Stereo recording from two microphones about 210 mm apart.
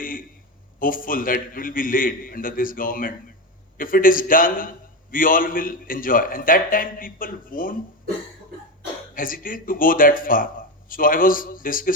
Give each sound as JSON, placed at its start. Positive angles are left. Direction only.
{"t": 0.0, "sound": "a sound", "side_deg": 40}
{"t": 0.8, "sound": "speech", "side_deg": 40}
{"t": 9.1, "sound": "speech", "side_deg": 40}